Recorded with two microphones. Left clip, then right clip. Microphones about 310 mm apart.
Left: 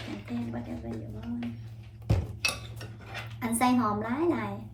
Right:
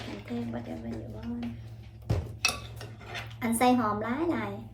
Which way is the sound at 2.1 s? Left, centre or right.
Left.